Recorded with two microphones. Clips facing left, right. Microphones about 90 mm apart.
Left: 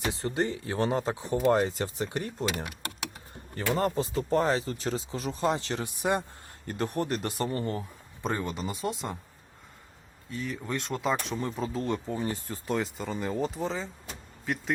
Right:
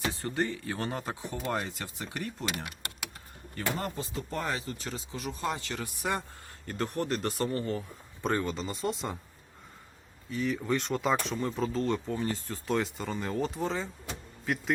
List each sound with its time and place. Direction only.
0.1 s speech: 20° left (ahead or behind)
8.2 s speech: centre (ahead or behind)
10.2 s speech: centre (ahead or behind); by 12.4 s 15° left (ahead or behind)
12.5 s speech: centre (ahead or behind)